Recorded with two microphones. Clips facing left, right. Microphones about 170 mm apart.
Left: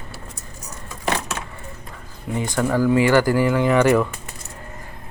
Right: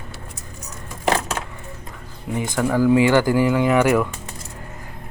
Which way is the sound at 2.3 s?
15° right (ahead or behind).